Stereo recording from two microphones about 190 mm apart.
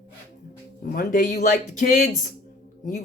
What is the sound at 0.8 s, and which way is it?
Speech, 45° left (ahead or behind).